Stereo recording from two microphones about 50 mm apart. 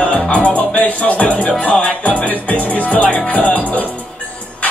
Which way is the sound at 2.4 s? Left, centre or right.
Left.